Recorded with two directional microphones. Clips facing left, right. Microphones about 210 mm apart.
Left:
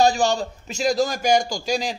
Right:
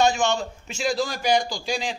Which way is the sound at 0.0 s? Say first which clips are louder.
Left 2 dB; 35° left (ahead or behind).